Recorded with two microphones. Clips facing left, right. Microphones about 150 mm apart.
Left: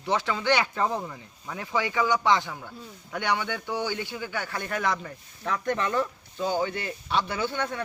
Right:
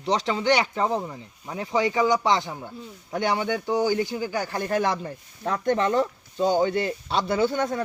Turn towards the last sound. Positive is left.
turn(degrees=-40)  # may be behind; listen again after turning